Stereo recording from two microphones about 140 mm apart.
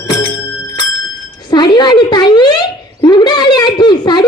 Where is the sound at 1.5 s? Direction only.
30° left (ahead or behind).